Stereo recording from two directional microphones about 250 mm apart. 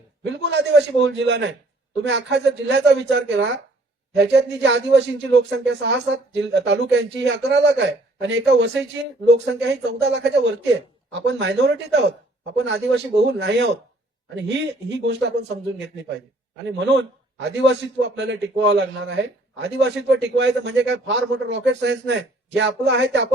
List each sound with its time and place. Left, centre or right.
0.3 s speech: right
16.6 s speech: right